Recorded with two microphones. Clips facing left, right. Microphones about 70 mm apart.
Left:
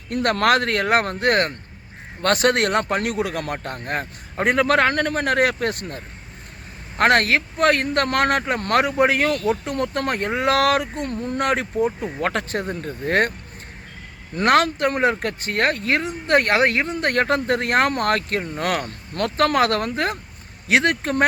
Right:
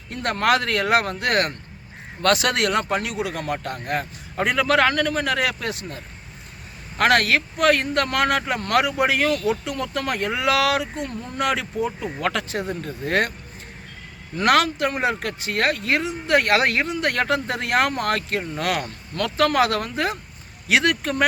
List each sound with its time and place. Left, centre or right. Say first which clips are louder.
0.1 s speech: left 2 dB; left
3.8 s speech: even; left
7.0 s speech: left 1 dB; left
9.4 s speech: left 2 dB; left
14.3 s speech: left 1 dB; left
16.6 s speech: left 2 dB; left
16.8 s speech: left 2 dB; left